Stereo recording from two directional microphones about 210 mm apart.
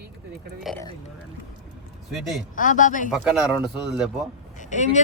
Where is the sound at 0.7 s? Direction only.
Centre (ahead or behind).